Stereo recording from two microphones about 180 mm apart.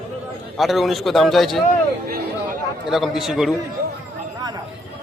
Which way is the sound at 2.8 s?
Centre (ahead or behind).